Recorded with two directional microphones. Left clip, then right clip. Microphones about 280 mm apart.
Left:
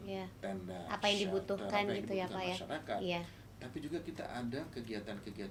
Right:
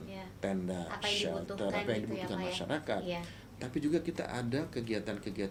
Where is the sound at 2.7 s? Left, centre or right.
Right.